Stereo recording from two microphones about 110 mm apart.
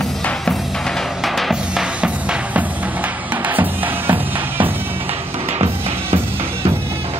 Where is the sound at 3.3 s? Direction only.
15° right (ahead or behind).